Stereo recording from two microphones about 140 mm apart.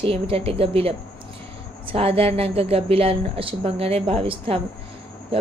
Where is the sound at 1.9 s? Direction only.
45° right (ahead or behind).